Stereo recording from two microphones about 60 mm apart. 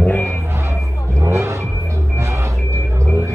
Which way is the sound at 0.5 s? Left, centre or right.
Right.